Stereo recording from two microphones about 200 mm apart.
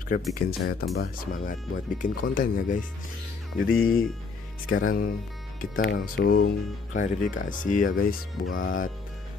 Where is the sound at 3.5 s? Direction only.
90° left.